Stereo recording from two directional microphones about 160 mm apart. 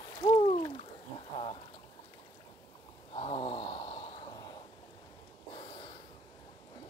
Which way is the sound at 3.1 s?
40° left (ahead or behind).